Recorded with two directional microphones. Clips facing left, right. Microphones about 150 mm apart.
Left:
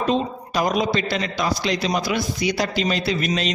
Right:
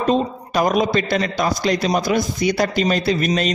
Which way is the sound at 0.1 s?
50° right (ahead or behind).